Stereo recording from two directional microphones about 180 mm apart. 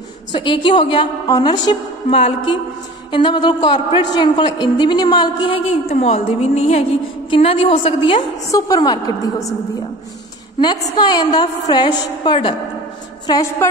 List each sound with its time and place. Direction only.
0.3 s a man's voice: 25° left (ahead or behind)
5.9 s a woman's voice: 35° left (ahead or behind)
8.5 s a man's voice: 20° left (ahead or behind)
11.0 s a man's voice: 25° left (ahead or behind)